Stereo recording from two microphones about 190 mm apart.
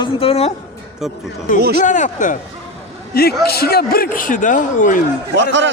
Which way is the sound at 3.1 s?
55° left (ahead or behind).